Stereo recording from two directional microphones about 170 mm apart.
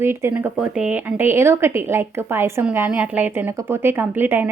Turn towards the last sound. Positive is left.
turn(degrees=-10)  # may be behind; listen again after turning